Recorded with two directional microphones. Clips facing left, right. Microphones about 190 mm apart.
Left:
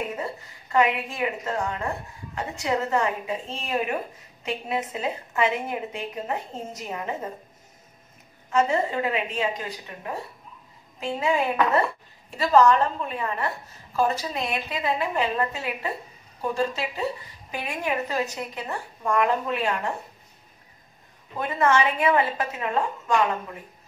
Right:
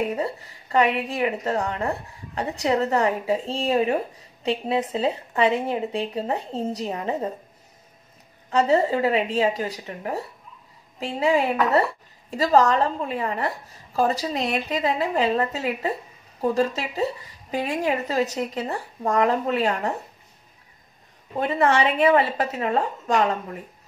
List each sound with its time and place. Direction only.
0.1 s a woman's voice: 35° right (ahead or behind)
8.5 s a woman's voice: 35° right (ahead or behind)
11.0 s a woman's voice: 35° right (ahead or behind)
17.5 s a woman's voice: 35° right (ahead or behind)
21.4 s a woman's voice: 35° right (ahead or behind)